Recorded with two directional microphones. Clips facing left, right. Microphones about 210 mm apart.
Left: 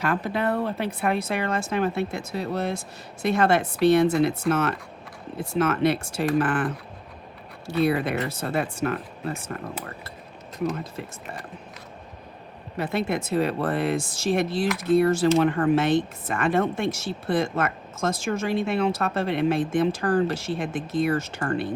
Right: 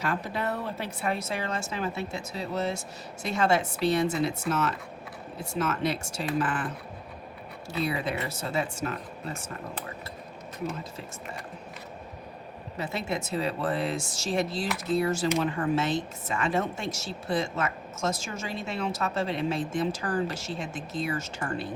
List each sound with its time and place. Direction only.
0.0 s speech: 60° left (ahead or behind)
7.7 s speech: 60° left (ahead or behind)
12.7 s speech: 55° left (ahead or behind)